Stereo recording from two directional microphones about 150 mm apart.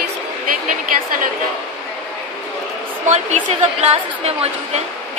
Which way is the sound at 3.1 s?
50° right (ahead or behind).